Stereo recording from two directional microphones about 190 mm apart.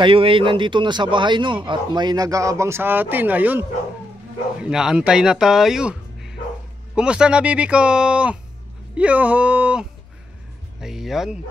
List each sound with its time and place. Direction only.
0.0 s a man's voice: 25° right (ahead or behind); by 11.3 s centre (ahead or behind)